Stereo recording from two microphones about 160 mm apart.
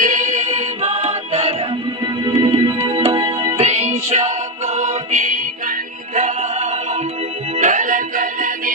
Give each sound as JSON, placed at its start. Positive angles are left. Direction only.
{"t": 0.0, "sound": "music", "side_deg": -55}